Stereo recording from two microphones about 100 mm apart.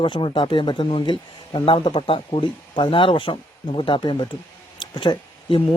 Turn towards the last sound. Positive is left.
turn(degrees=55)  # may be behind; listen again after turning